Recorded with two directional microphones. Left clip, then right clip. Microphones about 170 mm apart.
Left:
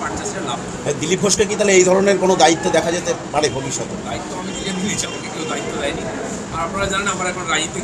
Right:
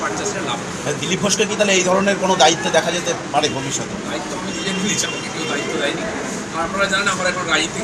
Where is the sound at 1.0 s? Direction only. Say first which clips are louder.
Left 2 dB; 90° left.